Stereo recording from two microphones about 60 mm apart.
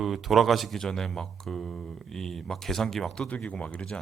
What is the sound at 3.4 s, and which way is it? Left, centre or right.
Speech, centre.